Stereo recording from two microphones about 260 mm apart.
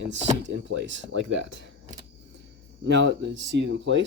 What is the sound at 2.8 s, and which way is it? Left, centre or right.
Speech, right.